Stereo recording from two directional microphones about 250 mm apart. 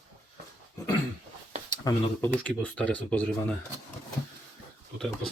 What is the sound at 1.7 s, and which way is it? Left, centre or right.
Speech, centre.